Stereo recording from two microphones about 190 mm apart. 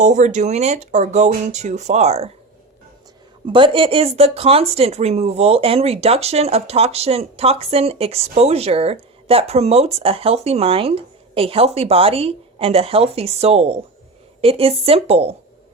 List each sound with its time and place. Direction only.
0.0 s speech: 40° right (ahead or behind)
3.4 s speech: 25° right (ahead or behind)